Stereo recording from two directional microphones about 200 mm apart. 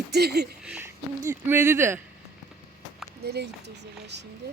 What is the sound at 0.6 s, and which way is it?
Speech, 10° right (ahead or behind).